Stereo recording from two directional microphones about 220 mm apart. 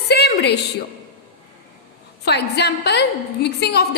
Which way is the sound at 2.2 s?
50° left (ahead or behind).